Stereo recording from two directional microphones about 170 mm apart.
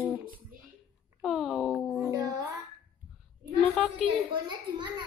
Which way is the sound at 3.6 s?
5° left (ahead or behind).